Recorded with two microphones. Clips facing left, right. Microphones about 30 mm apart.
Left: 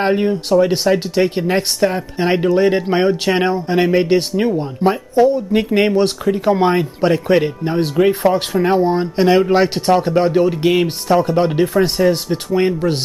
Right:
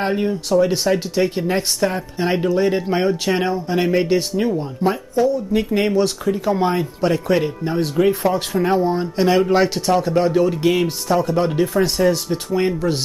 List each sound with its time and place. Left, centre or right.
0.0 s speech: left
8.0 s speech: left; by 9.7 s centre
9.8 s speech: left